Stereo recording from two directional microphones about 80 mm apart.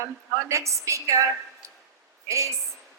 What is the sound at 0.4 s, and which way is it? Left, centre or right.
Speech, right.